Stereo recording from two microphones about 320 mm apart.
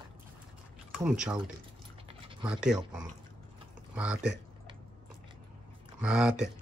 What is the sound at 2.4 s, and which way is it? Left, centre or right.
Speech, centre.